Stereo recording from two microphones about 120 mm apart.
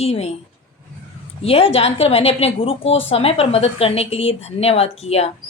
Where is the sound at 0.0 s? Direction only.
60° left (ahead or behind).